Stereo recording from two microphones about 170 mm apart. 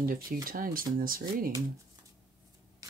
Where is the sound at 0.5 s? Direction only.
55° right (ahead or behind).